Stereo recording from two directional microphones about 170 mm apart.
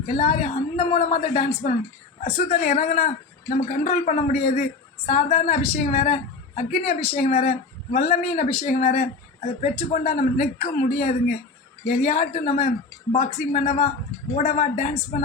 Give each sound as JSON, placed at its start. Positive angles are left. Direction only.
{"t": 0.1, "sound": "a woman's voice", "side_deg": 40}